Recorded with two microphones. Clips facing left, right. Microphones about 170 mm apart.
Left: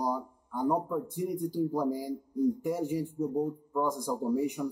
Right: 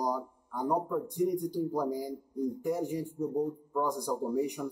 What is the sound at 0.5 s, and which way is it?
Speech, centre (ahead or behind).